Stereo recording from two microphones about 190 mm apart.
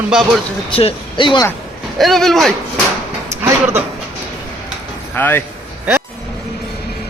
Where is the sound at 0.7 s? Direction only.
30° left (ahead or behind).